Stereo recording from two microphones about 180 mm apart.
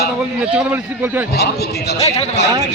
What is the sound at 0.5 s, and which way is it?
Speech, 10° right (ahead or behind).